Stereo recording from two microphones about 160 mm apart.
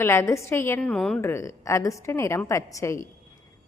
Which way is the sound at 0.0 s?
15° left (ahead or behind).